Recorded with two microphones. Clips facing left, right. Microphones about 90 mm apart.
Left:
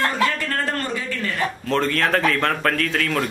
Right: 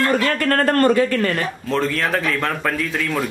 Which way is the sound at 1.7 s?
Centre (ahead or behind).